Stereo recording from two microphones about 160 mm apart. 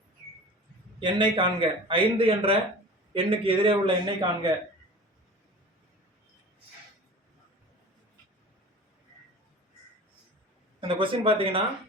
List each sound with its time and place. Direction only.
0.9 s speech: 30° right (ahead or behind)
10.8 s speech: 30° right (ahead or behind)